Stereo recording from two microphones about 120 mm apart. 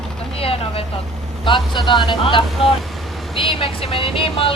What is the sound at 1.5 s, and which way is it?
Speech, 45° left (ahead or behind).